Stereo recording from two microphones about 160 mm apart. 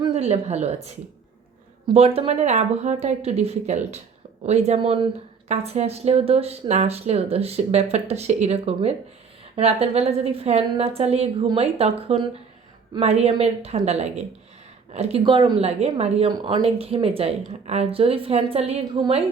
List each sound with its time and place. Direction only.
0.0 s speech: 35° right (ahead or behind)
1.9 s a woman's voice: 40° right (ahead or behind)